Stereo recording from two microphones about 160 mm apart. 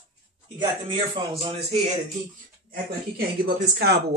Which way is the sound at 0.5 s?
30° right (ahead or behind).